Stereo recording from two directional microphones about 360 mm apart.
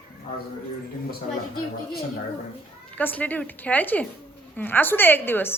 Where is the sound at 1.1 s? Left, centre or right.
Left.